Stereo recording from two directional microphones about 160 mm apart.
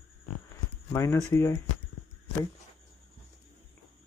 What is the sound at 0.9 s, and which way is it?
Speech, 20° left (ahead or behind).